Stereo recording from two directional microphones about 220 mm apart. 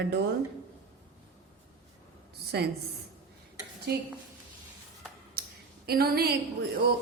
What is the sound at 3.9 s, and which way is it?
Speech, 50° right (ahead or behind).